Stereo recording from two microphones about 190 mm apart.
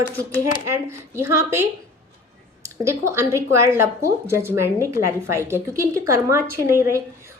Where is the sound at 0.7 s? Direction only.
15° right (ahead or behind).